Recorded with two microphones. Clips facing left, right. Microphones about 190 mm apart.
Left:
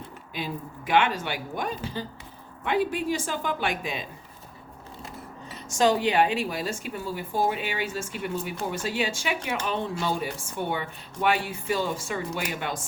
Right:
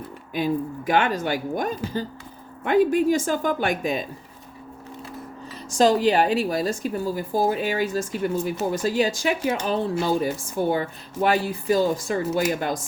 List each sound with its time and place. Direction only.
0.3 s speech: 45° right (ahead or behind)
5.7 s a woman's voice: 35° right (ahead or behind)